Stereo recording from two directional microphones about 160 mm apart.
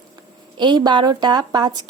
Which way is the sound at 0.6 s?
30° right (ahead or behind).